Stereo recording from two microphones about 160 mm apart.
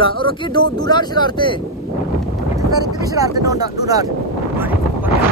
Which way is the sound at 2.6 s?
25° right (ahead or behind).